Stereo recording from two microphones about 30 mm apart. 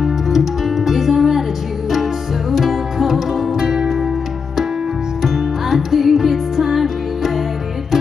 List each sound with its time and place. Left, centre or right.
0.0 s music: centre
2.5 s music: centre
3.6 s music: right
5.2 s music: centre